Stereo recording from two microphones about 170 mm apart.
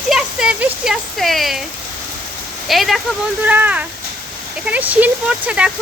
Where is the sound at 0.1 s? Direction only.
5° right (ahead or behind).